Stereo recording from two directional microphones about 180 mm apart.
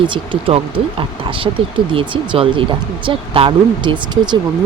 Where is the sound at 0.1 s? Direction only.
30° right (ahead or behind).